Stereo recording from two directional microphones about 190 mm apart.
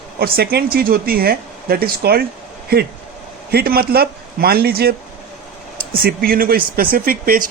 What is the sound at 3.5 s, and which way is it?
A man's voice, 55° right (ahead or behind).